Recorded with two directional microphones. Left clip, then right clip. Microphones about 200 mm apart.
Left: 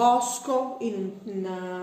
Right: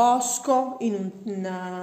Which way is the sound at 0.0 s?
45° right (ahead or behind).